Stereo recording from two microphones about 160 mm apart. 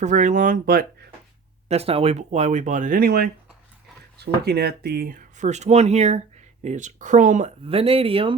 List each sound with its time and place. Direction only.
0.0 s speech: 50° right (ahead or behind); by 0.9 s 65° right (ahead or behind)
1.6 s speech: 40° right (ahead or behind); by 3.2 s 70° right (ahead or behind)
4.2 s speech: 90° right; by 8.4 s 35° right (ahead or behind)